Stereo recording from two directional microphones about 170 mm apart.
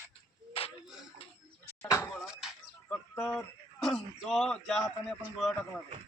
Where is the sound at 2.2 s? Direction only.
5° right (ahead or behind).